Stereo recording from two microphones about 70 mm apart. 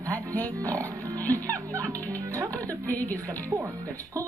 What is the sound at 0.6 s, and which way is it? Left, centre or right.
Speech, right.